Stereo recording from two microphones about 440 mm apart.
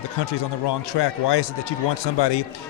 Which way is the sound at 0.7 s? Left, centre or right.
Left.